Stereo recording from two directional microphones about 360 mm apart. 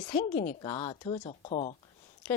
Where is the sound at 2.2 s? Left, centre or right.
Centre.